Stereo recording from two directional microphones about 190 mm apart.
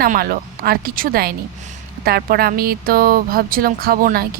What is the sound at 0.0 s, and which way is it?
Speech, 50° right (ahead or behind).